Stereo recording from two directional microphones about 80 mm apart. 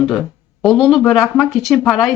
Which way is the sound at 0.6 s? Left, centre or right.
Centre.